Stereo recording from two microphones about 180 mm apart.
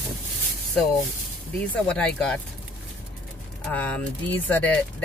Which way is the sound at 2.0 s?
5° left (ahead or behind).